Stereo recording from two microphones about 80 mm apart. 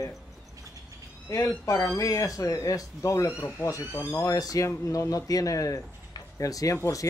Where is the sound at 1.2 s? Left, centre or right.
Left.